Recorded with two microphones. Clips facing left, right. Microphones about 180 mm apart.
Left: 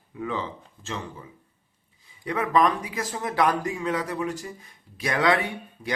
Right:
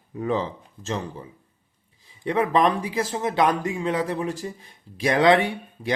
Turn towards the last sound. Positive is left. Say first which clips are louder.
# right 5 dB
turn(degrees=-30)  # may be behind; listen again after turning